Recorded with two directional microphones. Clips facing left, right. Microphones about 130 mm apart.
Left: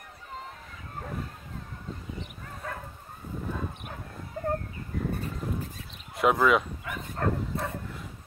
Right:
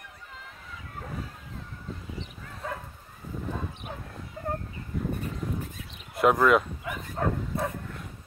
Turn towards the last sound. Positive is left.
turn(degrees=0)  # may be behind; listen again after turning